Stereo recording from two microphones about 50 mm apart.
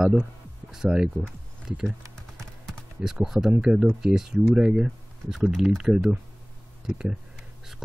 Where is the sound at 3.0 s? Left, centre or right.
Centre.